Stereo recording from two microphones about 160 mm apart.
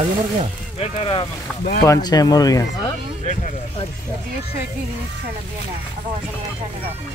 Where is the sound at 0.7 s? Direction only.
35° left (ahead or behind).